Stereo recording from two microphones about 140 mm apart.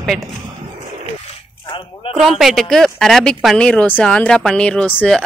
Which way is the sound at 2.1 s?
Centre (ahead or behind).